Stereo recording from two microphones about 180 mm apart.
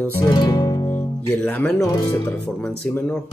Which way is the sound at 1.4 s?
10° left (ahead or behind).